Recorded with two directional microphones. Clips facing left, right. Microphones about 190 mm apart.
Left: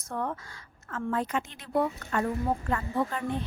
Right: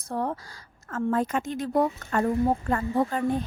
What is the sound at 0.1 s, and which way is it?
Speech, 35° right (ahead or behind).